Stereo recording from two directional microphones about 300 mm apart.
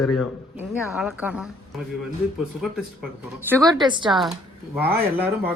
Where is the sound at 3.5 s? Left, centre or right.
Centre.